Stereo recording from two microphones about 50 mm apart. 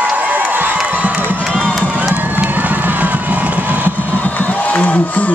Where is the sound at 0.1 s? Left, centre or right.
Right.